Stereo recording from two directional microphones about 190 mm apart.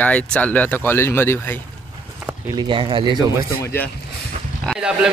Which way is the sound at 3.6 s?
15° left (ahead or behind).